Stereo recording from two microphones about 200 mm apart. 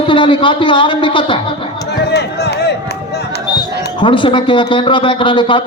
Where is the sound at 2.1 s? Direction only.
55° left (ahead or behind).